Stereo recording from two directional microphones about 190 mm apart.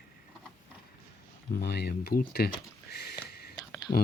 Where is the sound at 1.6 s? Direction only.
60° left (ahead or behind).